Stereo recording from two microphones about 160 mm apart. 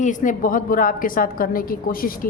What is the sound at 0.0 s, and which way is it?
A woman's voice, 50° left (ahead or behind).